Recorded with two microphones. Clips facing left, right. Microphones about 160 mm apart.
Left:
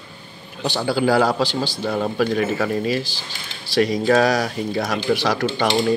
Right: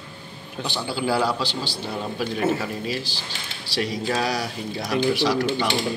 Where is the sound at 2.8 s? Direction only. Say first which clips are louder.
Left 6 dB; 50° left (ahead or behind).